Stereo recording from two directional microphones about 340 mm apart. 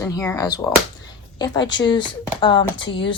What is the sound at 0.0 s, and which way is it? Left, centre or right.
Speech, centre.